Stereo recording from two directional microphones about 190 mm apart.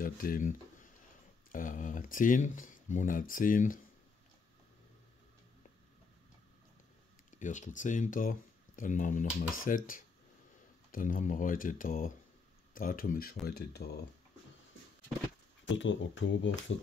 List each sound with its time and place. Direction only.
0.0 s speech: 50° left (ahead or behind)
7.2 s speech: 40° left (ahead or behind); by 13.9 s 55° left (ahead or behind)
15.6 s speech: 75° left (ahead or behind)